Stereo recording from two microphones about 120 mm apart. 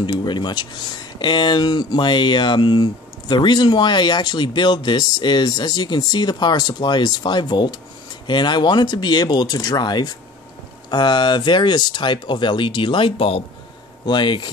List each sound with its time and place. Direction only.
0.0 s speech: 40° left (ahead or behind)